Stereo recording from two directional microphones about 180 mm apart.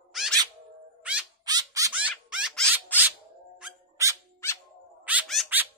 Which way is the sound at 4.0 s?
15° right (ahead or behind).